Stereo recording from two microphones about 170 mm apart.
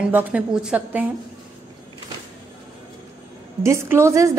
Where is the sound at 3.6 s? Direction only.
15° right (ahead or behind).